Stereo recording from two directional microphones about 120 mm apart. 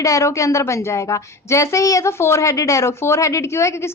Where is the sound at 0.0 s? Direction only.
25° left (ahead or behind).